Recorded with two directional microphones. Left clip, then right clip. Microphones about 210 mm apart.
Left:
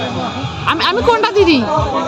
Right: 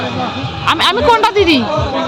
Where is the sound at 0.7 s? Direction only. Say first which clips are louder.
Right 2 dB; centre (ahead or behind).